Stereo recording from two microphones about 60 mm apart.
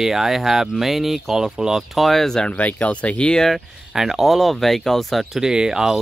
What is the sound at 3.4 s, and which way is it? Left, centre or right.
Speech, centre.